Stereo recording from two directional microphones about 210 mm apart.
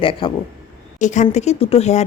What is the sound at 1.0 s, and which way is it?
A woman's voice, 35° left (ahead or behind).